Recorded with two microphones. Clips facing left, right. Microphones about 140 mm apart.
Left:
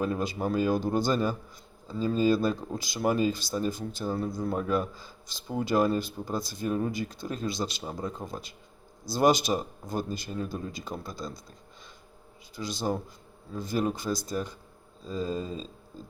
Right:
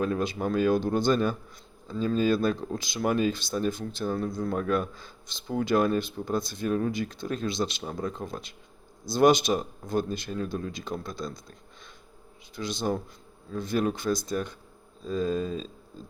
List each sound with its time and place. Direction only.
0.0 s a man's voice: 5° left (ahead or behind)
12.5 s a man's voice: 5° left (ahead or behind)